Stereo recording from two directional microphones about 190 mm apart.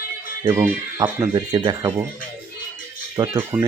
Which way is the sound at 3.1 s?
20° right (ahead or behind).